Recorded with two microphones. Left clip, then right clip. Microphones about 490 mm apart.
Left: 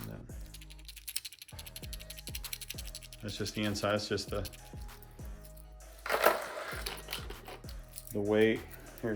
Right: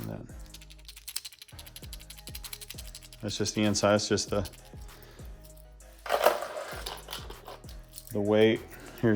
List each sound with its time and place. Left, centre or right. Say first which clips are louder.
0.9 s music: right 2 dB; centre
6.0 s a sound: right 3 dB; centre
8.1 s speech: right 4 dB; centre